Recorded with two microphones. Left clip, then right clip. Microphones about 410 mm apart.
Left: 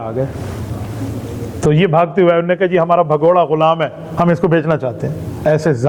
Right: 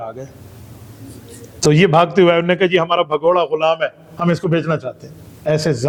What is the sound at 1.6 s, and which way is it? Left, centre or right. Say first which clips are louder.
A man's voice: even; right.